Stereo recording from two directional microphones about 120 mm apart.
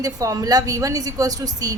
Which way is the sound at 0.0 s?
30° right (ahead or behind).